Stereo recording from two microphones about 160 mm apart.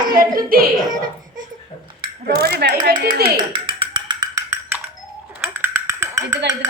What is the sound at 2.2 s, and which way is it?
Speech, 70° right (ahead or behind).